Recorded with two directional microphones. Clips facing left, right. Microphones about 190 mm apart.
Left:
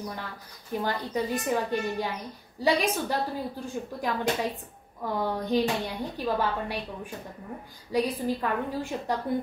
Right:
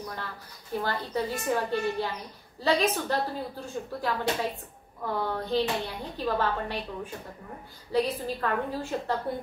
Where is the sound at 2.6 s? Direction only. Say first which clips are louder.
Even; 15° left (ahead or behind).